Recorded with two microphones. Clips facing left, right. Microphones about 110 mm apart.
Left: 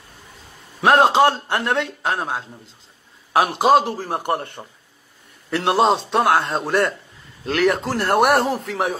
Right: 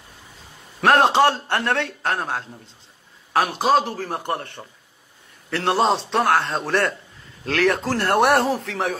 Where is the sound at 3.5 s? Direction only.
15° left (ahead or behind).